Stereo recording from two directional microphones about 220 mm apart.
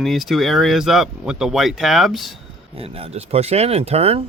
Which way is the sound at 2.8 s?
25° right (ahead or behind).